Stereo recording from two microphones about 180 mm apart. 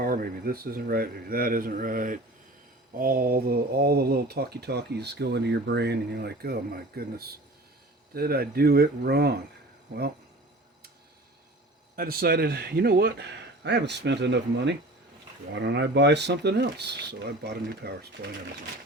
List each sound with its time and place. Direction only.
0.0 s speech: 55° right (ahead or behind)
11.9 s speech: 55° right (ahead or behind)